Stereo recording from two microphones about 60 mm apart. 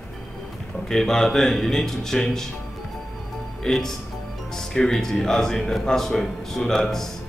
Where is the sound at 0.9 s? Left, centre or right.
Centre.